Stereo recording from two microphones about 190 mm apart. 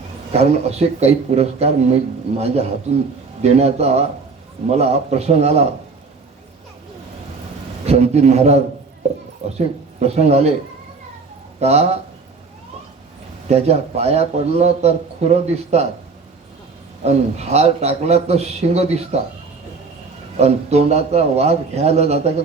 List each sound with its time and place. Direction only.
0.3 s a man's voice: 35° right (ahead or behind)
7.9 s a man's voice: 35° right (ahead or behind)
11.6 s a man's voice: 35° right (ahead or behind)
13.5 s a man's voice: 35° right (ahead or behind)
17.0 s a man's voice: 35° right (ahead or behind)
20.3 s a man's voice: 35° right (ahead or behind)